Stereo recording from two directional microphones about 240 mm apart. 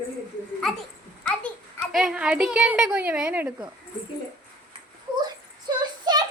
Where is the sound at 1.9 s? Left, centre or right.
Centre.